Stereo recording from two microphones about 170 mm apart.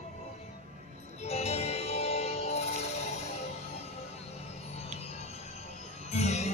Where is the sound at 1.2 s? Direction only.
35° left (ahead or behind).